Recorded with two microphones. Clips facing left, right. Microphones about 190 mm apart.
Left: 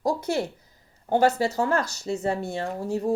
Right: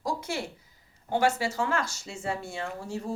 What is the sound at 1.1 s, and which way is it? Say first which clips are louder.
A woman's voice: left 5 dB; 40° left (ahead or behind).